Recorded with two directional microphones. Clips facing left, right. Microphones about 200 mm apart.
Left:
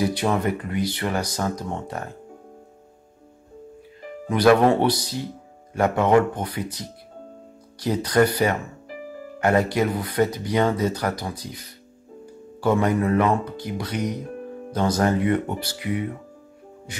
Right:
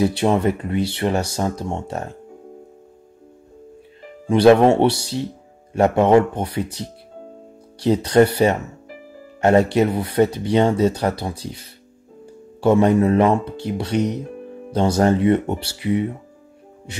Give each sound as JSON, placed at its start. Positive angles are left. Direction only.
{"t": 0.0, "sound": "speech", "side_deg": -25}
{"t": 4.3, "sound": "speech", "side_deg": -25}